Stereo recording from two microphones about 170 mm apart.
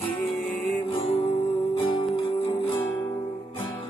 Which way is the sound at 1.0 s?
35° left (ahead or behind).